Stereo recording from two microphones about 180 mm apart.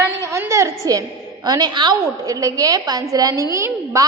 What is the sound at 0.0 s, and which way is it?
A woman's voice, 15° right (ahead or behind).